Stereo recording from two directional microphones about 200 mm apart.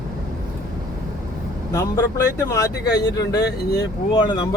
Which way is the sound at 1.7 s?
15° left (ahead or behind).